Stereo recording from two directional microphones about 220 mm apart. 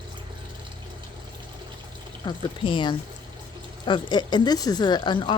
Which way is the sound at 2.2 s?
20° left (ahead or behind).